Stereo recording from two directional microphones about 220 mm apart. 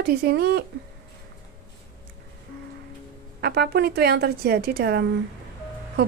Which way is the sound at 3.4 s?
45° right (ahead or behind).